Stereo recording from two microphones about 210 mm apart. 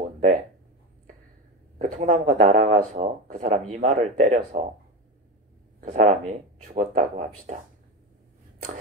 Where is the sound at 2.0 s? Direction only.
35° right (ahead or behind).